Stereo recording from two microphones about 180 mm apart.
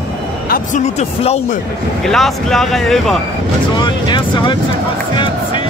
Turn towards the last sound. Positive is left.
turn(degrees=25)  # may be behind; listen again after turning